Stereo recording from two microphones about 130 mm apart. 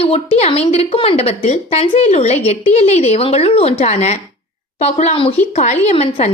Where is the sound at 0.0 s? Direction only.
50° left (ahead or behind).